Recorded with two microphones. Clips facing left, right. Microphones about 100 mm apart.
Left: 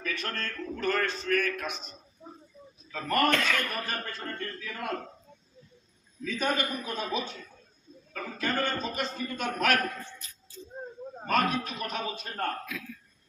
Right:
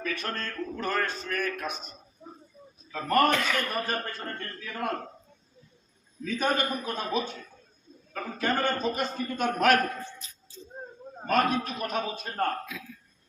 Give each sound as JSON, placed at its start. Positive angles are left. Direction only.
{"t": 0.0, "sound": "speech", "side_deg": -40}
{"t": 3.3, "sound": "a man's voice", "side_deg": -10}
{"t": 3.8, "sound": "a man's voice", "side_deg": -45}
{"t": 6.2, "sound": "a man's voice", "side_deg": -45}
{"t": 10.1, "sound": "speech", "side_deg": -20}
{"t": 11.3, "sound": "a man's voice", "side_deg": -45}
{"t": 12.7, "sound": "speech", "side_deg": -20}